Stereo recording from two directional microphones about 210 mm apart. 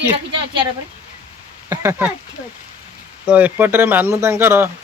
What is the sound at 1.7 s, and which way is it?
Speech, 15° right (ahead or behind).